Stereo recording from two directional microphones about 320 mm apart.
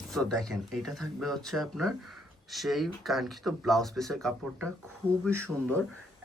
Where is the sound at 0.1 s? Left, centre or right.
Centre.